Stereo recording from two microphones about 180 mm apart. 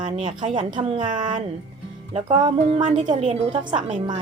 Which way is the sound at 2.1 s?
30° right (ahead or behind).